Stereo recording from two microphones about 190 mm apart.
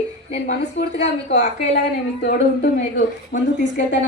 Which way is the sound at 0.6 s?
65° left (ahead or behind).